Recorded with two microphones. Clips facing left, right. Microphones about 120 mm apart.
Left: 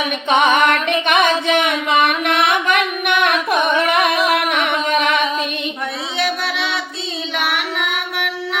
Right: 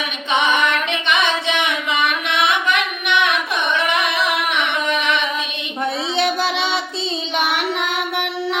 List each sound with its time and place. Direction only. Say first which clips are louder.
0.3 s music: left 4 dB; 50° left (ahead or behind)
6.1 s music: right 1 dB; 25° right (ahead or behind)
7.3 s singing: right 1 dB; 30° right (ahead or behind)